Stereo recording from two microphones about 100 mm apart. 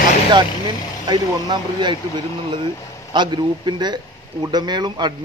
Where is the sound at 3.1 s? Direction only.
50° right (ahead or behind).